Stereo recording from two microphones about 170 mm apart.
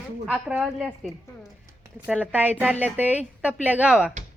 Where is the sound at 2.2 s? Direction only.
10° right (ahead or behind).